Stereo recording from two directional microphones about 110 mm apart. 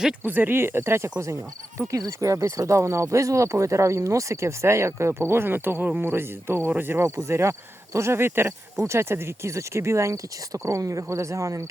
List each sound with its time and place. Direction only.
0.2 s speech: 15° right (ahead or behind)